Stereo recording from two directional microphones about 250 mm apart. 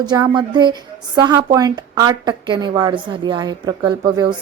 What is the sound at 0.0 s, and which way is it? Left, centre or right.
A woman's voice, centre.